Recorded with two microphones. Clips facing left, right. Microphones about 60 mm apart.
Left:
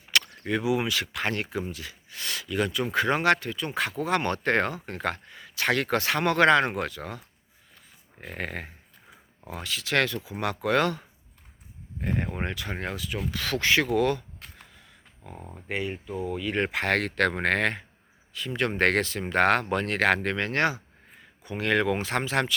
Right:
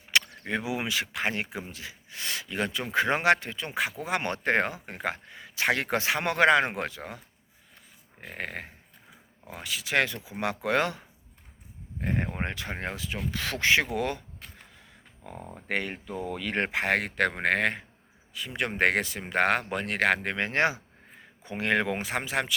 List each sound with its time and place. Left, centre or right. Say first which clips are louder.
0.1 s speech: left 1 dB; right
3.8 s speech: left 2 dB; centre
8.2 s a sound: left 2 dB; centre
9.5 s speech: left 1 dB; centre
12.0 s speech: left 1 dB; right
15.2 s speech: right 1 dB; right
16.7 s speech: left 1 dB; centre
20.2 s speech: left 1 dB; right
22.0 s speech: left 3 dB; centre